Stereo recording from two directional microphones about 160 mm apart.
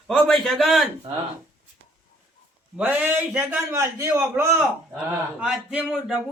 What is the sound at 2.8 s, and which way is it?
A man's voice, 10° right (ahead or behind).